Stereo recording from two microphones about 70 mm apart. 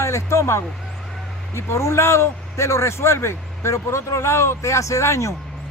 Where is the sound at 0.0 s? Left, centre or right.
Left.